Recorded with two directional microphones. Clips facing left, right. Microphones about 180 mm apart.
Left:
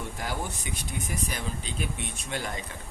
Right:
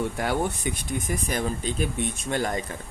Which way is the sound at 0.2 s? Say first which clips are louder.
Right 8 dB; 60° right (ahead or behind).